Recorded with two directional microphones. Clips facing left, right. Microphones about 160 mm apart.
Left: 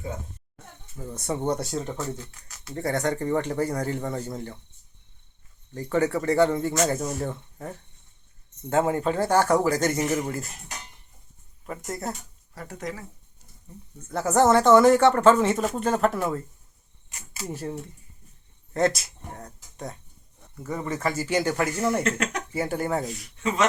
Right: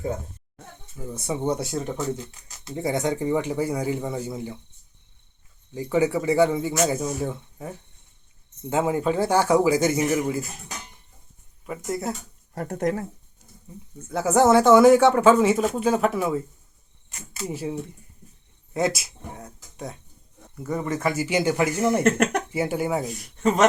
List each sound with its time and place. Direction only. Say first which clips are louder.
1.0 s speech: right 1 dB; centre (ahead or behind)
5.7 s speech: right 2 dB; 10° right (ahead or behind)
11.6 s speech: right 4 dB; 5° right (ahead or behind)
12.5 s speech: right 9 dB; 50° right (ahead or behind)
14.1 s speech: right 2 dB; 5° right (ahead or behind)
17.4 s speech: right 3 dB; 10° right (ahead or behind)
22.0 s speech: right 7 dB; 50° right (ahead or behind)
22.5 s speech: right 2 dB; 10° right (ahead or behind)
23.1 s speech: right 5 dB; 45° right (ahead or behind)